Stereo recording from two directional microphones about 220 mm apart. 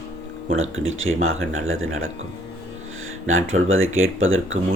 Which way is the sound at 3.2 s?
65° right (ahead or behind).